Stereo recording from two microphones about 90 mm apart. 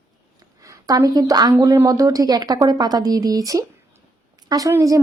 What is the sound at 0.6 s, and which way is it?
A woman's voice, 35° right (ahead or behind).